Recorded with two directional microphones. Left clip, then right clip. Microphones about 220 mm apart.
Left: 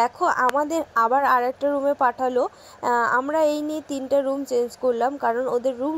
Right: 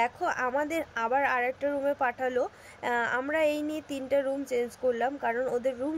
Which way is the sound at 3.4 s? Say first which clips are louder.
Left 6 dB; 15° left (ahead or behind).